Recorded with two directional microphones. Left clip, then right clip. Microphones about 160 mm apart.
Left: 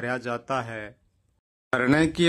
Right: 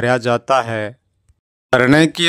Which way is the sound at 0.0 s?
45° right (ahead or behind).